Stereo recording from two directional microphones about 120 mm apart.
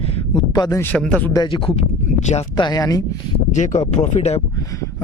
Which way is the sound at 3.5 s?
90° left.